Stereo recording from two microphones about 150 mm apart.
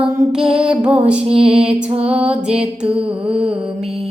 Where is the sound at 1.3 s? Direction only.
40° right (ahead or behind).